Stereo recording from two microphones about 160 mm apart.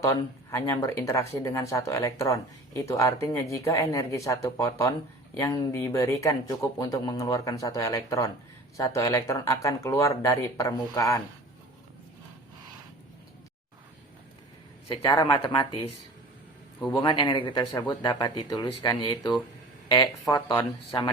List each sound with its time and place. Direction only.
0.0 s speech: 15° left (ahead or behind)
15.0 s speech: 25° left (ahead or behind)
16.9 s speech: 30° left (ahead or behind)
20.5 s speech: 25° left (ahead or behind)